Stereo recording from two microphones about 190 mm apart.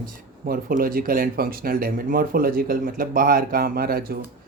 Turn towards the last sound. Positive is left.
turn(degrees=-50)  # may be behind; listen again after turning